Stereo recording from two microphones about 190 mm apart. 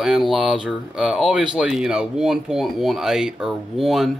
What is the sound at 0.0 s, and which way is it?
Speech, centre (ahead or behind).